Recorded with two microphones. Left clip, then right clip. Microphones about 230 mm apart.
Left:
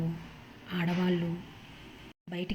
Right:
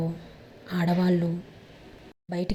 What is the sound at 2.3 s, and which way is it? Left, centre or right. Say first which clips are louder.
Speech: right 6 dB; centre.